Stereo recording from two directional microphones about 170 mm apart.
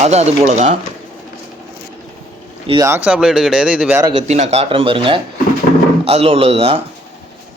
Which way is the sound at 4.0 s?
30° right (ahead or behind).